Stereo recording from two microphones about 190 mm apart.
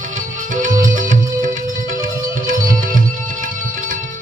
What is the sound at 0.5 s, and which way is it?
Music, 40° right (ahead or behind).